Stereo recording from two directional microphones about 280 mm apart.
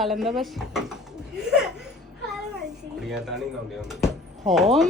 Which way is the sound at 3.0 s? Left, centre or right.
Centre.